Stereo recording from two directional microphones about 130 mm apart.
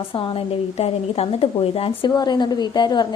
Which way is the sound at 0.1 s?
40° left (ahead or behind).